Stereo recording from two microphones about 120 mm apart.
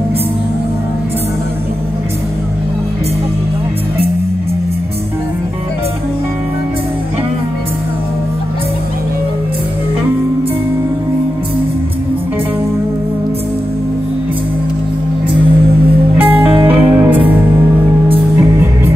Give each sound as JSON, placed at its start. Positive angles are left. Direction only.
{"t": 16.2, "sound": "music", "side_deg": -15}